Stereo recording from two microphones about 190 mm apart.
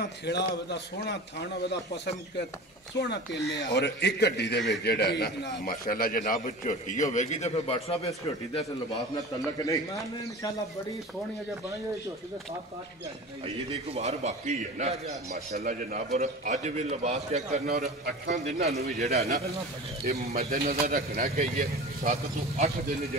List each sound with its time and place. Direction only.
0.0 s a man's voice: 60° left (ahead or behind)
3.0 s a man's voice: 65° left (ahead or behind); by 8.1 s 30° left (ahead or behind)
13.7 s a man's voice: 35° right (ahead or behind)
20.3 s a man's voice: 50° right (ahead or behind)